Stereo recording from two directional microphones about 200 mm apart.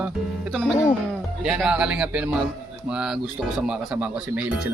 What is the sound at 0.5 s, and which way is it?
Speech, centre (ahead or behind).